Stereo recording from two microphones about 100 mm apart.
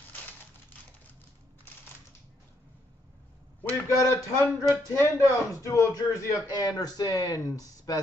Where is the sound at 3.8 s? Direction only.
30° left (ahead or behind).